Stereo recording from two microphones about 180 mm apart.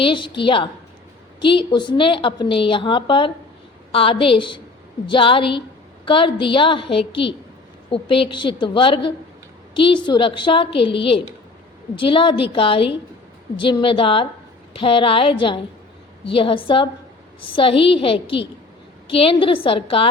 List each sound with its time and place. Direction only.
0.0 s a woman's voice: 30° left (ahead or behind)